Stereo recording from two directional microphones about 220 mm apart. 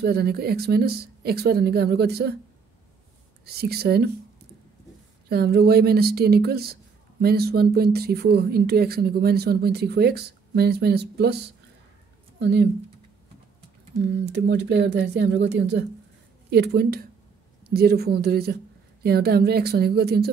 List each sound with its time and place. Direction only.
0.0 s speech: 45° right (ahead or behind)
3.4 s speech: 45° right (ahead or behind)
5.3 s speech: 45° right (ahead or behind)
14.3 s speech: 50° right (ahead or behind)